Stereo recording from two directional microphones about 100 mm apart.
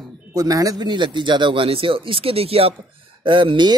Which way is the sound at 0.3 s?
35° right (ahead or behind).